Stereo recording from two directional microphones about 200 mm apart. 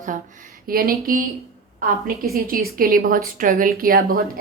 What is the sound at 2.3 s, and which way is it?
A woman's voice, 50° right (ahead or behind).